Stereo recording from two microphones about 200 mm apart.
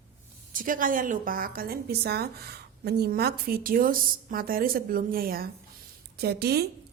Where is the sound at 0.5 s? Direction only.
45° right (ahead or behind).